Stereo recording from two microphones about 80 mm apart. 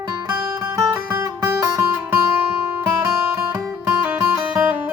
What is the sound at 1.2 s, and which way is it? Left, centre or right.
Music, right.